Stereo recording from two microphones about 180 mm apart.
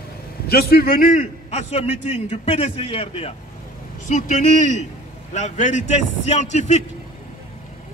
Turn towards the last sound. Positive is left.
turn(degrees=40)  # may be behind; listen again after turning